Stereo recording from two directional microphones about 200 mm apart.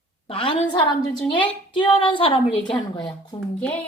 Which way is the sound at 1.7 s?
25° left (ahead or behind).